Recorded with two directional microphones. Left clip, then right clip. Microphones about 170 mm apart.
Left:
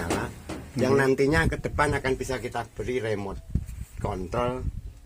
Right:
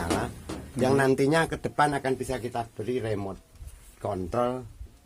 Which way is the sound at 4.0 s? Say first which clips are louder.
Right 1 dB; 40° right (ahead or behind).